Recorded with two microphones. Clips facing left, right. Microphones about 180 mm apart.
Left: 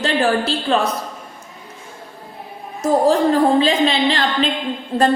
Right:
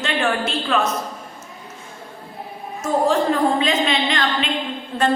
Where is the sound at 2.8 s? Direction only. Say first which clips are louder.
Left 4 dB; 35° left (ahead or behind).